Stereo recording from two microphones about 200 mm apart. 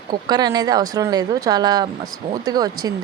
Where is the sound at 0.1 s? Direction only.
20° right (ahead or behind).